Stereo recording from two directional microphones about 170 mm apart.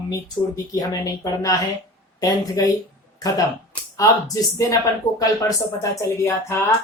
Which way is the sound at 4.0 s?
20° left (ahead or behind).